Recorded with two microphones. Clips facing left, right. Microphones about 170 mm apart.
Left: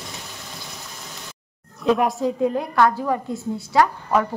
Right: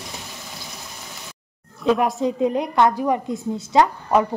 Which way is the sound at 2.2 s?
20° right (ahead or behind).